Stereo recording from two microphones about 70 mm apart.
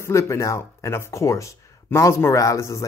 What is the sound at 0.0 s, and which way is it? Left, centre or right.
Speech, left.